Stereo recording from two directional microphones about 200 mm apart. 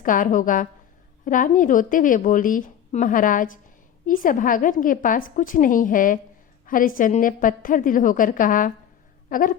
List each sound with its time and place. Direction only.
0.0 s a woman's voice: 40° left (ahead or behind)